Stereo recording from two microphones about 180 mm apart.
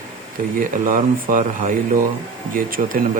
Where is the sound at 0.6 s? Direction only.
50° right (ahead or behind).